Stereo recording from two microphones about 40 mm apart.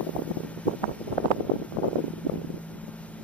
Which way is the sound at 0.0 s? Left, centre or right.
Left.